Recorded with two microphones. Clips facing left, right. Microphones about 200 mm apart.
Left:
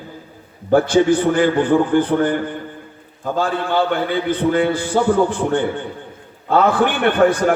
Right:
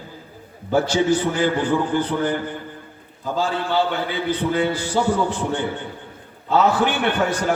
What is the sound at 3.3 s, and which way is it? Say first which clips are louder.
A man's voice: left 2 dB; 55° left (ahead or behind).